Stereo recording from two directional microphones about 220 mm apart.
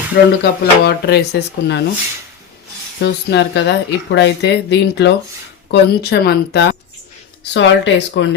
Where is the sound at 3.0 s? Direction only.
50° left (ahead or behind).